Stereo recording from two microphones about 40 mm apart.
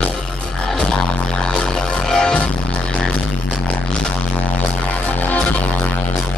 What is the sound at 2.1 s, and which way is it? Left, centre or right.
Music, centre.